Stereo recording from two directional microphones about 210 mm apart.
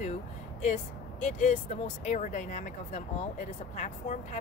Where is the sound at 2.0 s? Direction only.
35° left (ahead or behind).